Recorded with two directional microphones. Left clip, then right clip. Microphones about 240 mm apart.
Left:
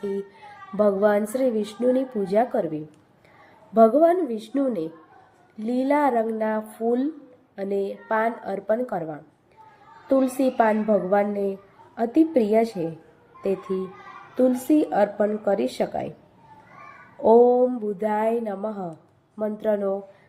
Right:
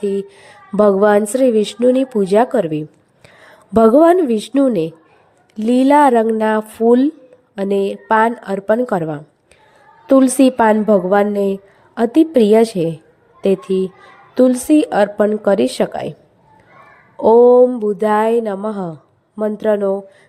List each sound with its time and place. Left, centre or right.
0.1 s a woman's voice: right
17.2 s speech: right